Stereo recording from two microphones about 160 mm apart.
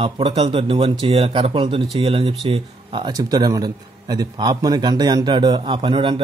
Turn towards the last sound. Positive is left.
turn(degrees=-30)  # may be behind; listen again after turning